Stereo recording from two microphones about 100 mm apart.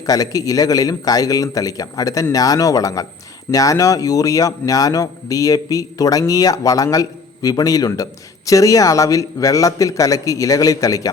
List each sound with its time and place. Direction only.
0.0 s a man's voice: 35° left (ahead or behind)